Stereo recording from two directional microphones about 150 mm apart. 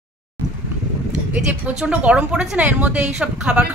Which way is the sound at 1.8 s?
10° right (ahead or behind).